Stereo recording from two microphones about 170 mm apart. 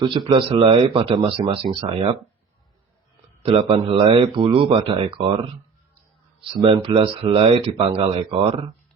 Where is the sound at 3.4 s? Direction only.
35° right (ahead or behind).